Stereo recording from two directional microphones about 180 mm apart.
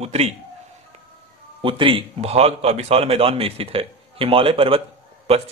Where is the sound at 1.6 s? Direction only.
30° right (ahead or behind).